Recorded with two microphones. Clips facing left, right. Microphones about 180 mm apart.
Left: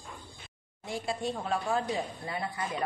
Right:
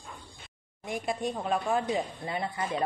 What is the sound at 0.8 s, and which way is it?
Speech, 20° right (ahead or behind).